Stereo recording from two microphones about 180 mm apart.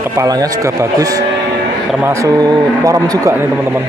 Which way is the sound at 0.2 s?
20° right (ahead or behind).